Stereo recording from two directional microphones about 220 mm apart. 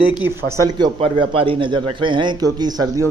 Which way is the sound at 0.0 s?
5° right (ahead or behind).